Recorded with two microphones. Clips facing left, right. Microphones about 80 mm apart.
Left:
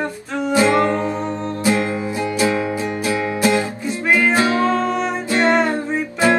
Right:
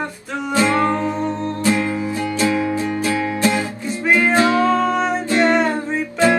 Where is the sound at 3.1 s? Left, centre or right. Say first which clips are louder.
Left 2 dB; left.